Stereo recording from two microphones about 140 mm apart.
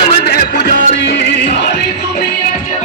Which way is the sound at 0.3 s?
90° left.